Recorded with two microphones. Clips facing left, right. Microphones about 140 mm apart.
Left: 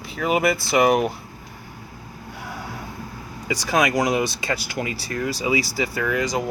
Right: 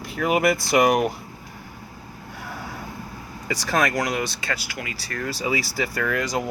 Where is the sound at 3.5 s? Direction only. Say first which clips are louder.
Left 2 dB; centre (ahead or behind).